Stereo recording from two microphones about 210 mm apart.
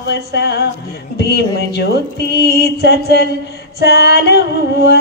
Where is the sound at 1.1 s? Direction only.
50° left (ahead or behind).